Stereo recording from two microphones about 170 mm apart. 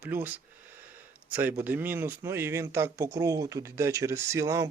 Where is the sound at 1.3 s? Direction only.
10° right (ahead or behind).